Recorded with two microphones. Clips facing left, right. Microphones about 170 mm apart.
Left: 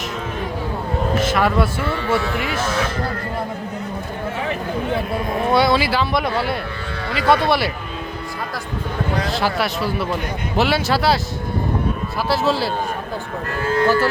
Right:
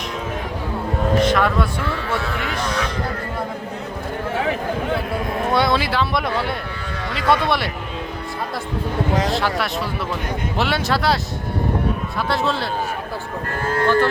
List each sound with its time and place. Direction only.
1.2 s vehicle: 5° left (ahead or behind)
2.0 s speech: 5° left (ahead or behind)
5.5 s speech: centre (ahead or behind)
9.3 s speech: 5° left (ahead or behind)
12.3 s speech: 5° left (ahead or behind)
13.6 s speech: 50° right (ahead or behind)